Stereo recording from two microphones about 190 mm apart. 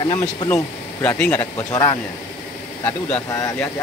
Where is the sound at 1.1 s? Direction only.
5° left (ahead or behind).